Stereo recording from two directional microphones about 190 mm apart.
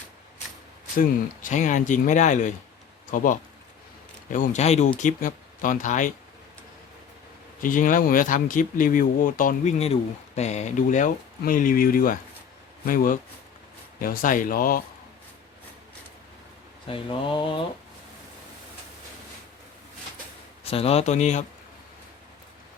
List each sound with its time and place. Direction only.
0.9 s speech: 40° left (ahead or behind)
4.3 s speech: 40° left (ahead or behind)
7.6 s speech: 45° left (ahead or behind)
16.9 s speech: 25° left (ahead or behind)
20.7 s speech: 30° left (ahead or behind)